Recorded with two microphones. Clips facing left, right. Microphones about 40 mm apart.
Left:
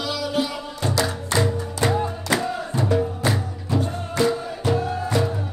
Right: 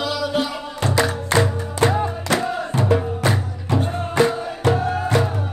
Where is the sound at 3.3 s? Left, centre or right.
Right.